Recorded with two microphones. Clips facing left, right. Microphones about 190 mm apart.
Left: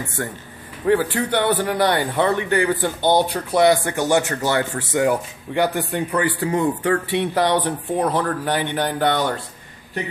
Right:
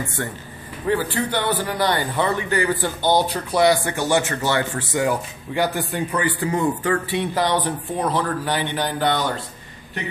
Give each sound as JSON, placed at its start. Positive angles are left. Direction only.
{"t": 0.8, "sound": "speech", "side_deg": 65}